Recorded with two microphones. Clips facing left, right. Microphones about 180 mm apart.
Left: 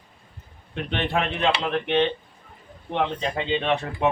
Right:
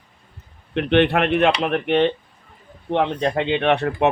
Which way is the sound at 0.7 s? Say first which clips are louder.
Right 9 dB; 70° right (ahead or behind).